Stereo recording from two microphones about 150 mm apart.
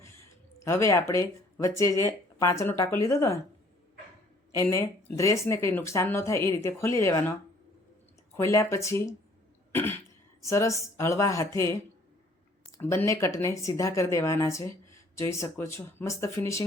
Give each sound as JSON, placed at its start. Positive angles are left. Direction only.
{"t": 0.6, "sound": "speech", "side_deg": 20}
{"t": 5.0, "sound": "speech", "side_deg": 20}
{"t": 8.4, "sound": "speech", "side_deg": 20}
{"t": 9.7, "sound": "cough", "side_deg": 15}
{"t": 10.4, "sound": "speech", "side_deg": 20}